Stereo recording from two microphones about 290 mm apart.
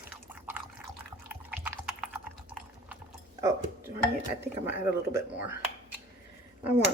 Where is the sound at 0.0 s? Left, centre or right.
Centre.